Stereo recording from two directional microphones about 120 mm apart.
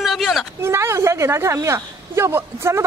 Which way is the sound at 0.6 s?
20° right (ahead or behind).